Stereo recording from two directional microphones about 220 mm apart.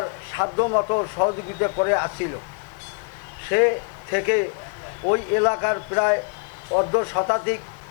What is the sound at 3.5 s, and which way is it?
A man's voice, 15° left (ahead or behind).